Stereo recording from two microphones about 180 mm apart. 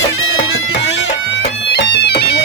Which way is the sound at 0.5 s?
75° left (ahead or behind).